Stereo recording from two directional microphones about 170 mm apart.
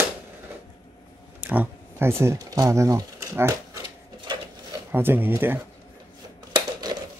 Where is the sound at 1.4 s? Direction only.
10° right (ahead or behind).